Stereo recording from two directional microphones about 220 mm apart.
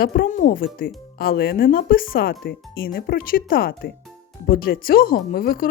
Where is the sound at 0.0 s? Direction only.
40° left (ahead or behind).